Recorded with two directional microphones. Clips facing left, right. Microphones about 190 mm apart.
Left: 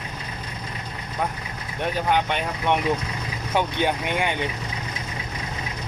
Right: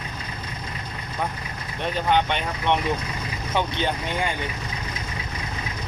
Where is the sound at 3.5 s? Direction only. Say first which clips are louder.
Left 2 dB; 10° left (ahead or behind).